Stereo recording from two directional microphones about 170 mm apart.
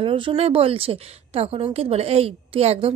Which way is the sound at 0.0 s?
30° right (ahead or behind).